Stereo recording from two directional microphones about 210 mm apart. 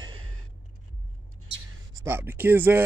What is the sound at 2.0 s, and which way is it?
Speech, 10° right (ahead or behind).